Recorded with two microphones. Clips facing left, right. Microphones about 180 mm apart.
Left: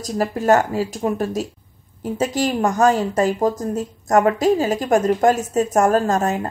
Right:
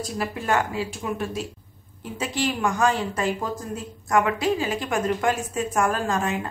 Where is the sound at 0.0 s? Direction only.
40° left (ahead or behind).